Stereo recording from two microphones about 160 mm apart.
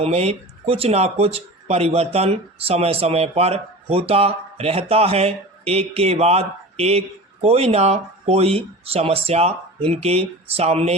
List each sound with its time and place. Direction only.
0.0 s speech: 40° right (ahead or behind)